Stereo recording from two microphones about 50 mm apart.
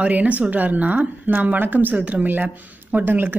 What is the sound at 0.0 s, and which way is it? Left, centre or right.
Speech, right.